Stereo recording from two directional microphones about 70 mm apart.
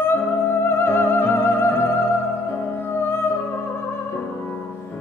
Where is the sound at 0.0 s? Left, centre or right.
Left.